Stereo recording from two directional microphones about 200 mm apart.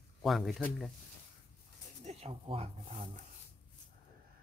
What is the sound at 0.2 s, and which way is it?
Speech, centre (ahead or behind).